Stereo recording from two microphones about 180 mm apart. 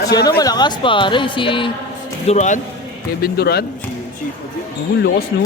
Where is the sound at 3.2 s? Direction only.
60° left (ahead or behind).